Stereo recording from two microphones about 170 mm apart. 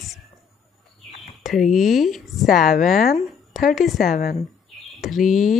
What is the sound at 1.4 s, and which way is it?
Speech, centre (ahead or behind).